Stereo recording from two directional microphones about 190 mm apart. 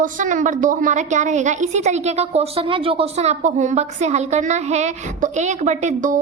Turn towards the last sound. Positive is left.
turn(degrees=-40)  # may be behind; listen again after turning